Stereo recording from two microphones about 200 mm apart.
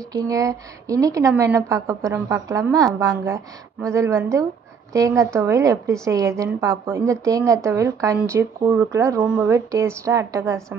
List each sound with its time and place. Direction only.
0.1 s a woman's voice: 15° right (ahead or behind)